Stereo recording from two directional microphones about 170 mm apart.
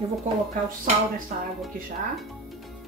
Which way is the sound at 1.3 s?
50° right (ahead or behind).